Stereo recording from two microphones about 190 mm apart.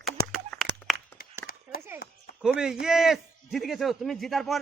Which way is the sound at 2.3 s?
50° left (ahead or behind).